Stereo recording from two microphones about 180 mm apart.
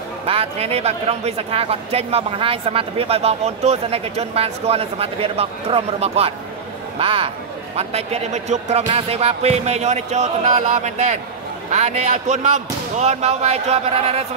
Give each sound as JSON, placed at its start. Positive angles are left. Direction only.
{"t": 0.3, "sound": "speech", "side_deg": -35}